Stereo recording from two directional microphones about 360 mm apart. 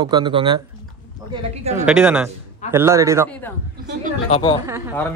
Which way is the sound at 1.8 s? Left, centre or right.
Centre.